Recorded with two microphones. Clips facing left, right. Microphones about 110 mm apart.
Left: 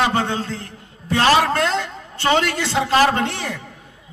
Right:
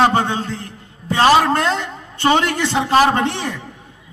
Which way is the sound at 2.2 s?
20° right (ahead or behind).